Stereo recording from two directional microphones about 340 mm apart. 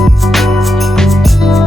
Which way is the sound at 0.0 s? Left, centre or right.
Centre.